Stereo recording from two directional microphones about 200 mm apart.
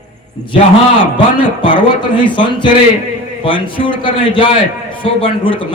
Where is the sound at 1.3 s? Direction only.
25° left (ahead or behind).